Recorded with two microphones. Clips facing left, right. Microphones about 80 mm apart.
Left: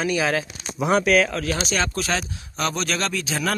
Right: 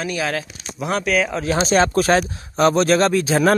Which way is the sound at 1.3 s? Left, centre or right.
Right.